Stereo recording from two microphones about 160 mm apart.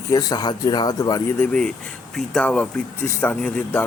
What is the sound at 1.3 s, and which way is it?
Speech, 5° left (ahead or behind).